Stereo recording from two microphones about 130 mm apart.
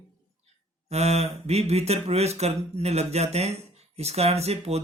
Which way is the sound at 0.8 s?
55° right (ahead or behind).